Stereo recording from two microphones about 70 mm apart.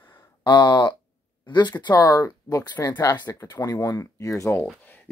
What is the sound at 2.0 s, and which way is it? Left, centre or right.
Speech, left.